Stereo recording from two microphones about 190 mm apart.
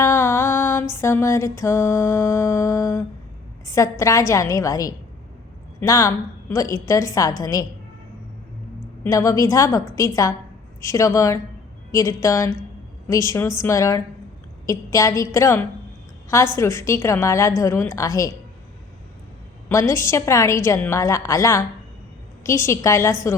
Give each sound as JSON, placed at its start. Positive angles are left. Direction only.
{"t": 0.0, "sound": "music", "side_deg": 15}
{"t": 3.7, "sound": "a woman's voice", "side_deg": 15}
{"t": 9.0, "sound": "a woman's voice", "side_deg": 15}
{"t": 19.6, "sound": "a woman's voice", "side_deg": 15}